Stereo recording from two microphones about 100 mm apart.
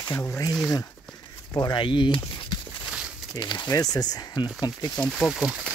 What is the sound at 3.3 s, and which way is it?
Speech, 45° left (ahead or behind).